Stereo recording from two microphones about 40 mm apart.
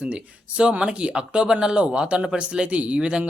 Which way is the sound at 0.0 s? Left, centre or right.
Right.